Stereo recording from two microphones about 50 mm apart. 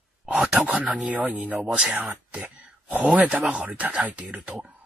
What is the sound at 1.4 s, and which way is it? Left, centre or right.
Speech, right.